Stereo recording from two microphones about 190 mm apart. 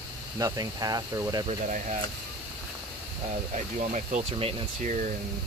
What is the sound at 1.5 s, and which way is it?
Speech, 40° right (ahead or behind).